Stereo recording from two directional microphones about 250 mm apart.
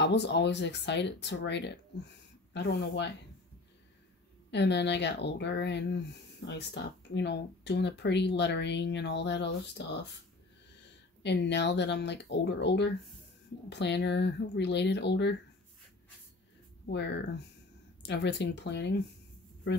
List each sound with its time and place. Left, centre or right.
0.0 s speech: left
4.5 s speech: left
11.2 s speech: left
16.9 s speech: left